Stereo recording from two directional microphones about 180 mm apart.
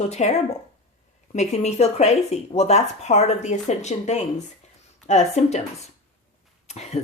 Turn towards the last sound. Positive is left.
turn(degrees=35)  # may be behind; listen again after turning